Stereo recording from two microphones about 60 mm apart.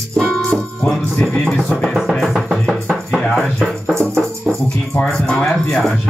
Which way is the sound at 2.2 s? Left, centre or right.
Centre.